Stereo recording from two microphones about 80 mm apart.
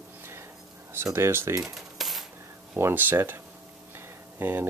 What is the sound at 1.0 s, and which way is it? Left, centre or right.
Speech, right.